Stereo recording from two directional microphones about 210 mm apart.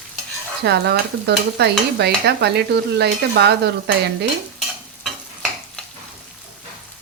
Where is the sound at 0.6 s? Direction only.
50° right (ahead or behind).